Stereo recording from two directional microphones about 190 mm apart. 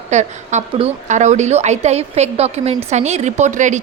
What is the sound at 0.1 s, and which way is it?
A woman's voice, 40° right (ahead or behind).